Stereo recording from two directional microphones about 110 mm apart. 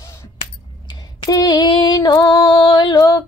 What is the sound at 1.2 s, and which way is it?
Female singing, 35° left (ahead or behind).